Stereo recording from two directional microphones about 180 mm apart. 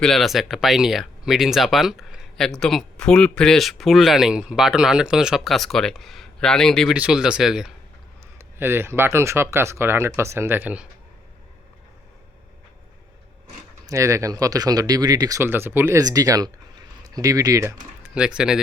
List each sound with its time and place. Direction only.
0.0 s speech: centre (ahead or behind)
13.8 s speech: 15° right (ahead or behind)
18.1 s speech: 5° right (ahead or behind)